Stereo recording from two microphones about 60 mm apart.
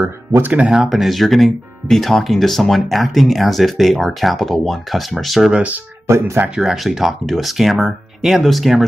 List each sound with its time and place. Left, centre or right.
0.5 s speech: centre
0.8 s speech: centre
5.5 s speech: right
6.0 s speech: right
6.5 s speech: centre